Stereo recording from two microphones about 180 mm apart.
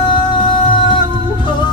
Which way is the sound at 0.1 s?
25° left (ahead or behind).